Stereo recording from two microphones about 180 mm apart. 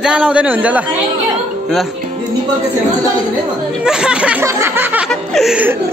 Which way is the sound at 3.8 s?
5° right (ahead or behind).